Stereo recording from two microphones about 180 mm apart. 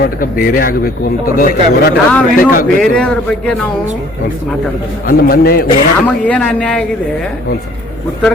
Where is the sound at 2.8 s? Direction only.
5° left (ahead or behind).